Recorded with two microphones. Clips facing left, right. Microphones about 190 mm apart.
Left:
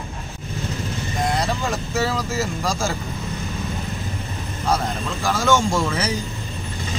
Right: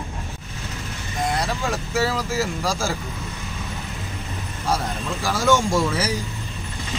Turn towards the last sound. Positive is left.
turn(degrees=-10)  # may be behind; listen again after turning